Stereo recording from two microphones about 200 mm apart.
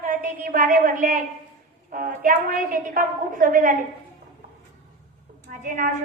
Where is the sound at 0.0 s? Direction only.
45° right (ahead or behind).